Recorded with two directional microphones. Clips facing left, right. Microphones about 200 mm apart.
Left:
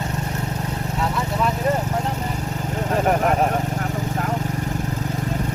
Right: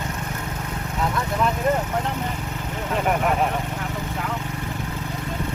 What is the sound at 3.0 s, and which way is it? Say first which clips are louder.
Vehicle: left 2 dB; 40° left (ahead or behind).